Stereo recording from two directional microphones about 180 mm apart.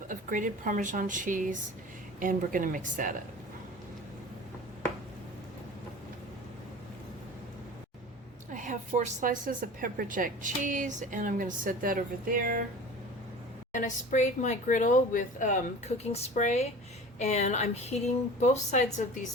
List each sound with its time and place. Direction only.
0.1 s a woman's voice: 45° right (ahead or behind)
8.5 s a woman's voice: 45° right (ahead or behind)
13.7 s a woman's voice: 45° left (ahead or behind)